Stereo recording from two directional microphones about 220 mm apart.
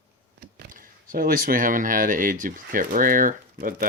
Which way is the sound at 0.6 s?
40° right (ahead or behind).